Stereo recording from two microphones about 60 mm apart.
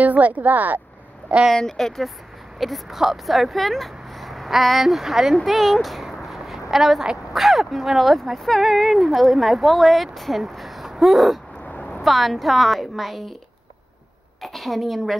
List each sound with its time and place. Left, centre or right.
0.0 s speech: right
1.5 s speech: centre
11.6 s a sound: left
11.9 s a woman's voice: centre
14.4 s speech: centre